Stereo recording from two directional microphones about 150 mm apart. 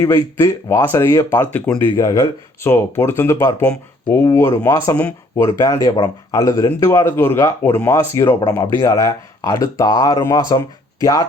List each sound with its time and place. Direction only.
0.0 s speech: 15° left (ahead or behind)
2.0 s speech: 20° left (ahead or behind)